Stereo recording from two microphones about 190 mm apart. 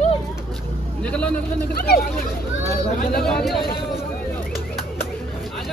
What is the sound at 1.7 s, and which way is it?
Speech, 50° left (ahead or behind).